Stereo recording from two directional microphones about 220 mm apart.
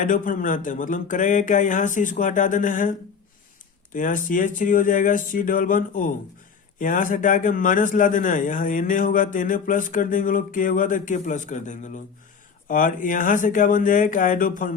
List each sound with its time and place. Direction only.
0.0 s a man's voice: 35° left (ahead or behind)
3.9 s a man's voice: 35° left (ahead or behind)